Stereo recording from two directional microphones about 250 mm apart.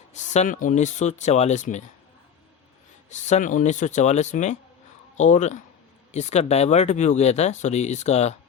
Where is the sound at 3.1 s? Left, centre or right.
Left.